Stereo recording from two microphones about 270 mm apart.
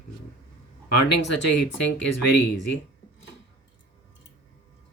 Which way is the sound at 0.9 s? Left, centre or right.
Left.